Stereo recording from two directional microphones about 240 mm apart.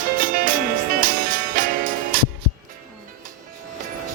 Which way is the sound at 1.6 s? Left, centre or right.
Right.